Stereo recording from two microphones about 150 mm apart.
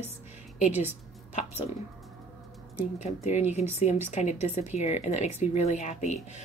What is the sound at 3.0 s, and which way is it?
Speech, 50° left (ahead or behind).